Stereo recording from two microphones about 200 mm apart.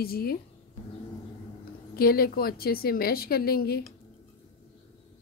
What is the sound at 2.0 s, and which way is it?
A woman's voice, 50° left (ahead or behind).